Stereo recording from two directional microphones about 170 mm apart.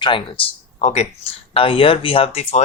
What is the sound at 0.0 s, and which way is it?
Speech, 30° left (ahead or behind).